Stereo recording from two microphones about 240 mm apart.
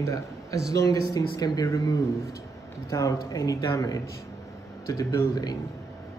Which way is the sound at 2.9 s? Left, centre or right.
Centre.